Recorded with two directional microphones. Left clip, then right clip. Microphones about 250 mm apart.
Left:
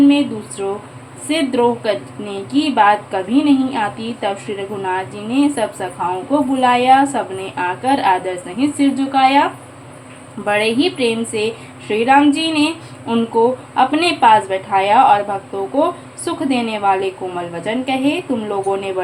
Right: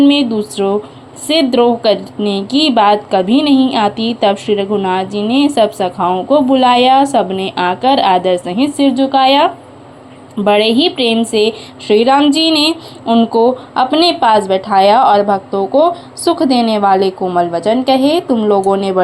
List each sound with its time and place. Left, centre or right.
0.1 s a woman's voice: right